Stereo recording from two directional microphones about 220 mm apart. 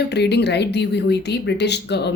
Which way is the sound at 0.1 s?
50° left (ahead or behind).